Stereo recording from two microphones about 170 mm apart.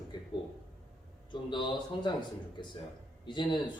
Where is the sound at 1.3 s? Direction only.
30° left (ahead or behind).